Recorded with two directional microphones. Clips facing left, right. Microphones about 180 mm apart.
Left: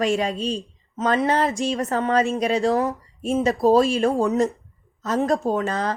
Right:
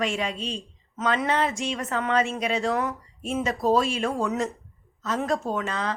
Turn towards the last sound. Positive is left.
turn(degrees=40)  # may be behind; listen again after turning